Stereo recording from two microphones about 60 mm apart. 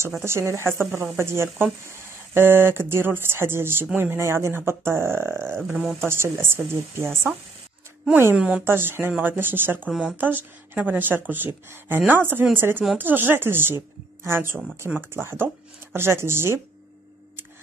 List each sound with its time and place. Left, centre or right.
0.2 s speech: right
4.2 s speech: right
8.4 s speech: centre
8.6 s speech: right